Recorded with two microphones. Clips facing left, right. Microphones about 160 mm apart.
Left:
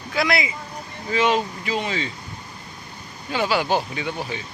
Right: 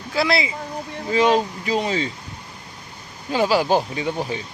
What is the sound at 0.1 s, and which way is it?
Speech, 30° right (ahead or behind).